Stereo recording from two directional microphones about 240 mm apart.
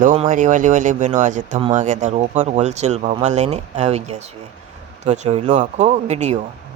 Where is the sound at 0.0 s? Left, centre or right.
Right.